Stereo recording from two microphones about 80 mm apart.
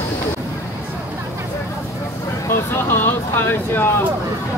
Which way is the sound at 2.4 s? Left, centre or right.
Left.